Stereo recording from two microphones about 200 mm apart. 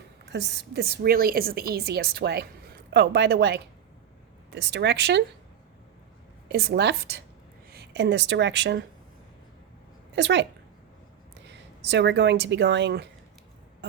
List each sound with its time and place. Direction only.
0.3 s a woman's voice: 60° right (ahead or behind)
6.5 s a woman's voice: 55° right (ahead or behind)
10.2 s a woman's voice: 60° right (ahead or behind)
11.9 s a woman's voice: 60° right (ahead or behind)